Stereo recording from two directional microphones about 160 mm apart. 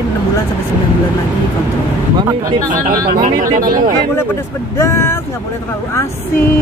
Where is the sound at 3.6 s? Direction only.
60° right (ahead or behind).